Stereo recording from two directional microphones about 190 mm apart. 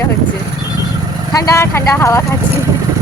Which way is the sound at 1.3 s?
15° left (ahead or behind).